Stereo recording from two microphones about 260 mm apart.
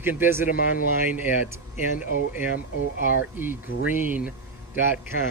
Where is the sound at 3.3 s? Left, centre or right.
Centre.